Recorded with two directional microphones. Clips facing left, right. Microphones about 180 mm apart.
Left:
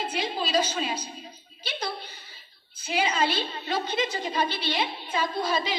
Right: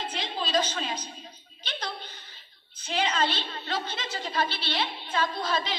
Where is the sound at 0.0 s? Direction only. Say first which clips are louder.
Left 4 dB; 10° left (ahead or behind).